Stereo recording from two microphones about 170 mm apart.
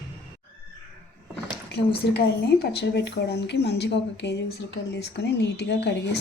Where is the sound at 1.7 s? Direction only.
75° left (ahead or behind).